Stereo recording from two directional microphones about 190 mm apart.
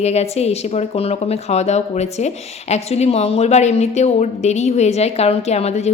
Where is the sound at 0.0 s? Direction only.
35° left (ahead or behind).